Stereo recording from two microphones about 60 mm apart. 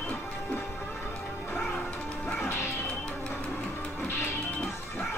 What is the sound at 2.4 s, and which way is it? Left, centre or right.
Music, left.